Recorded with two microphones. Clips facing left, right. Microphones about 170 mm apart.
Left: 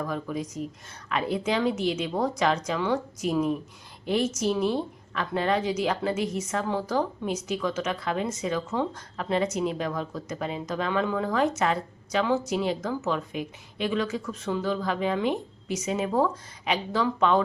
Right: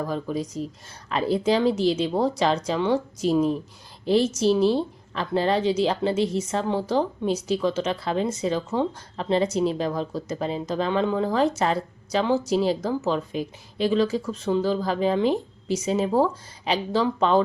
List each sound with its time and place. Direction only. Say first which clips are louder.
0.0 s a woman's voice: right 3 dB; 30° right (ahead or behind)